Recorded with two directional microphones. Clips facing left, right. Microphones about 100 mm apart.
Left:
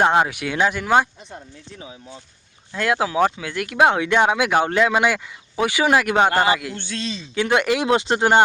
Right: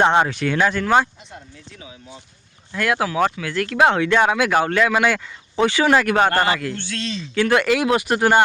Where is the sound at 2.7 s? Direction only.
20° left (ahead or behind).